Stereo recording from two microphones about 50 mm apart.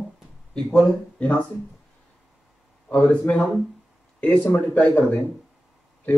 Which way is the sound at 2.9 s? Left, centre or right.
Left.